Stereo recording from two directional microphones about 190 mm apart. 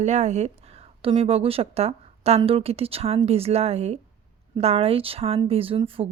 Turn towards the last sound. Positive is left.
turn(degrees=-30)  # may be behind; listen again after turning